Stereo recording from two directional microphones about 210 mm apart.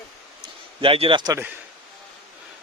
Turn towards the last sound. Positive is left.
turn(degrees=-15)  # may be behind; listen again after turning